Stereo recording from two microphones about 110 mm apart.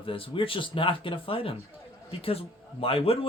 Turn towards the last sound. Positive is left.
turn(degrees=60)  # may be behind; listen again after turning